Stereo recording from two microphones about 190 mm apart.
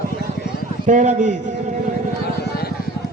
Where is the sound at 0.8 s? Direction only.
40° right (ahead or behind).